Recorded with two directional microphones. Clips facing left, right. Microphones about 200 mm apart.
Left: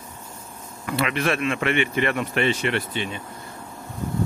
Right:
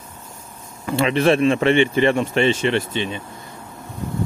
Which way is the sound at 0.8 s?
30° right (ahead or behind).